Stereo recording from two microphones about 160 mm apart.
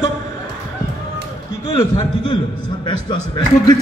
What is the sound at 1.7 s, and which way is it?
Speech, 30° left (ahead or behind).